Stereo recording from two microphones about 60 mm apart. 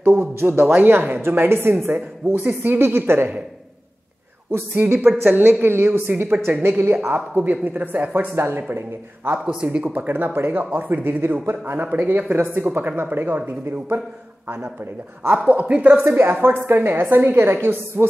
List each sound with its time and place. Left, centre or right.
0.0 s speech: right
4.5 s speech: right
15.7 s a woman's voice: centre
16.0 s speech: right